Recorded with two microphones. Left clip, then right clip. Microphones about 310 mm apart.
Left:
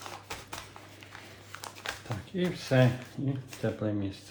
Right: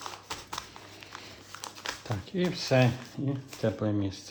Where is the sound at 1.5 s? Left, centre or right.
Centre.